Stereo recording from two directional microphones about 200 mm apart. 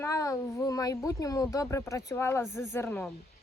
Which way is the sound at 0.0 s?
15° left (ahead or behind).